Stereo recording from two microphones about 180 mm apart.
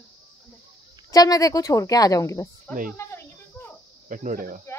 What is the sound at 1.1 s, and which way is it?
A woman's voice, 20° left (ahead or behind).